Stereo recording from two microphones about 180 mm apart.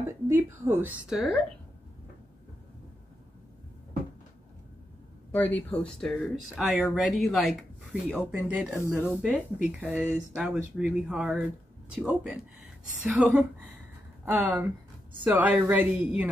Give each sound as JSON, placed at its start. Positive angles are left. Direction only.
{"t": 0.0, "sound": "speech", "side_deg": -15}
{"t": 5.3, "sound": "speech", "side_deg": 10}